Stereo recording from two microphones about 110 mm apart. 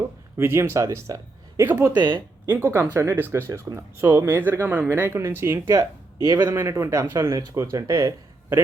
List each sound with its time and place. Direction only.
0.3 s speech: 25° right (ahead or behind)
2.0 s speech: 40° right (ahead or behind)
2.5 s speech: 25° right (ahead or behind)